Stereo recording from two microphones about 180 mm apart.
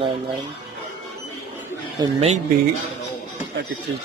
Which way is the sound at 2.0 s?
35° right (ahead or behind).